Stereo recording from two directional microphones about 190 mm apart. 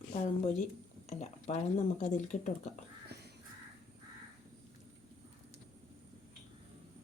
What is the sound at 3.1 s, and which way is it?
Crow, 60° right (ahead or behind).